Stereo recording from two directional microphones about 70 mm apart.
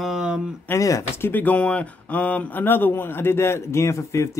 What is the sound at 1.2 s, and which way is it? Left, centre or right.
Speech, left.